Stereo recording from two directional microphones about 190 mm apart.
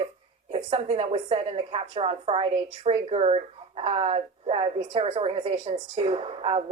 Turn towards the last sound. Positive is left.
turn(degrees=-30)  # may be behind; listen again after turning